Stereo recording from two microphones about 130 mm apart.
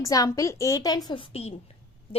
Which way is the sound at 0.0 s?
25° left (ahead or behind).